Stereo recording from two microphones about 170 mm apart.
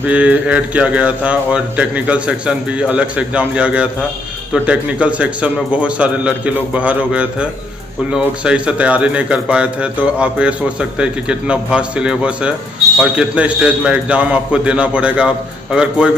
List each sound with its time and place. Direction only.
0.0 s a man's voice: 10° right (ahead or behind)